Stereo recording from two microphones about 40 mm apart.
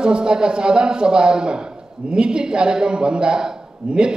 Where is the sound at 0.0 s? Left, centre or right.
Right.